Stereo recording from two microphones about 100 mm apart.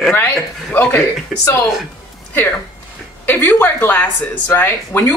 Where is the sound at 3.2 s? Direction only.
20° left (ahead or behind).